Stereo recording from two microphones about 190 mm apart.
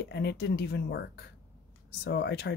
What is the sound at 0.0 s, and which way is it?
Speech, 60° left (ahead or behind).